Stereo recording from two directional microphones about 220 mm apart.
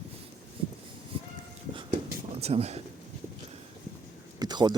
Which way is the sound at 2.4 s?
30° right (ahead or behind).